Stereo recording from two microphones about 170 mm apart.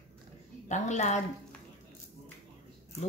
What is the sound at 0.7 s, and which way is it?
Speech, 45° left (ahead or behind).